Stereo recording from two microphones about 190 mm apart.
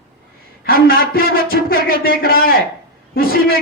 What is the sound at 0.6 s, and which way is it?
A man's voice, 50° left (ahead or behind).